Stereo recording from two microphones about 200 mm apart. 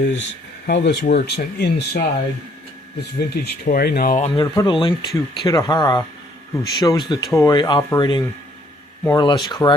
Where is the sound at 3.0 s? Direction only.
55° left (ahead or behind).